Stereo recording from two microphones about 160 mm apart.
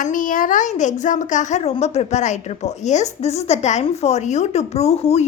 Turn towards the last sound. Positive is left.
turn(degrees=40)  # may be behind; listen again after turning